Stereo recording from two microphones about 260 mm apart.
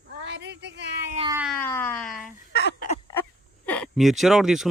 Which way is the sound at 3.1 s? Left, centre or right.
Centre.